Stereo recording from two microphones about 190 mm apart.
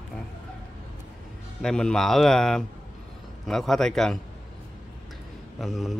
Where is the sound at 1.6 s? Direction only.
5° left (ahead or behind).